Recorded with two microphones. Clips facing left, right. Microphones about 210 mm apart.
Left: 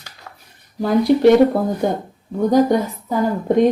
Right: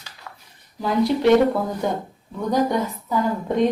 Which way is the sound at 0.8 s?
50° left (ahead or behind).